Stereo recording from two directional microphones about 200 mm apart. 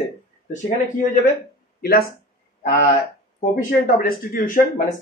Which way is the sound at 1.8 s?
50° left (ahead or behind).